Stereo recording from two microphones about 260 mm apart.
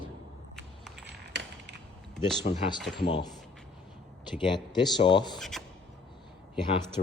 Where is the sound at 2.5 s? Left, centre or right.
Left.